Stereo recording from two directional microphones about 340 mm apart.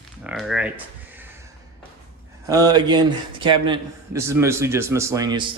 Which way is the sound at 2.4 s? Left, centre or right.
Centre.